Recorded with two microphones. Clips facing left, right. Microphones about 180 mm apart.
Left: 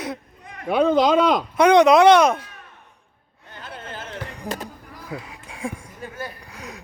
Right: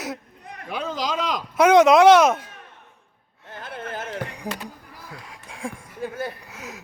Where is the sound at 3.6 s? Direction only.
55° right (ahead or behind).